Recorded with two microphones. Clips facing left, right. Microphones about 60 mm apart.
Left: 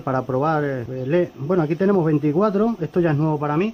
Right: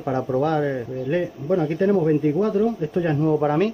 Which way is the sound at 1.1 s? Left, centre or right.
Left.